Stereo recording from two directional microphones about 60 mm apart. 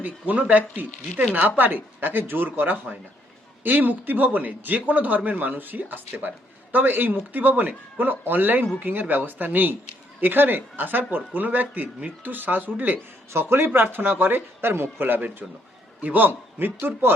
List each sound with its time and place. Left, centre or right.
0.0 s a man's voice: right
13.3 s a man's voice: right